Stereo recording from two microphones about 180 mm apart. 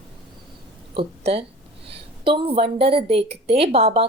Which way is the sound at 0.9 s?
30° right (ahead or behind).